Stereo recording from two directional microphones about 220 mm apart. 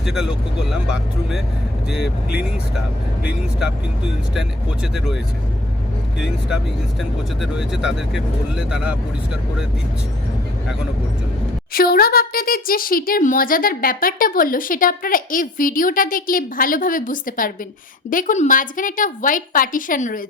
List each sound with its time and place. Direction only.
0.0 s speech: centre (ahead or behind)
2.0 s speech: 50° left (ahead or behind)
4.4 s speech: centre (ahead or behind)
7.0 s speech: centre (ahead or behind)
11.7 s speech: 40° left (ahead or behind)